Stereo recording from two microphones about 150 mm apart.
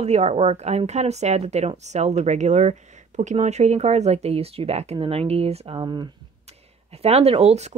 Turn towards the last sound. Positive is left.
turn(degrees=-45)  # may be behind; listen again after turning